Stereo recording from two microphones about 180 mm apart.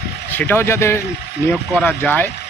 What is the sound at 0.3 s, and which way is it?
A man's voice, 10° left (ahead or behind).